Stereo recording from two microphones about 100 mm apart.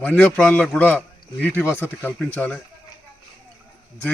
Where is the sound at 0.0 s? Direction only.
15° left (ahead or behind).